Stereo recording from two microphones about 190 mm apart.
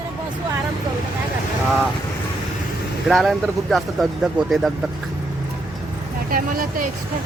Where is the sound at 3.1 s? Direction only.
Centre (ahead or behind).